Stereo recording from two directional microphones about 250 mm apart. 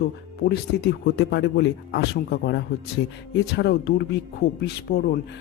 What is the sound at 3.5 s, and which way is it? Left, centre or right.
Speech, left.